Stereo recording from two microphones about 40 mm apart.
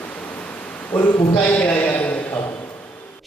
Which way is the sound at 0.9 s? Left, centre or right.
Left.